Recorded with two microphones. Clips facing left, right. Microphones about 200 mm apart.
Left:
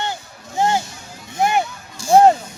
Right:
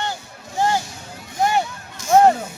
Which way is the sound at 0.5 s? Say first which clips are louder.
Left 2 dB; 20° left (ahead or behind).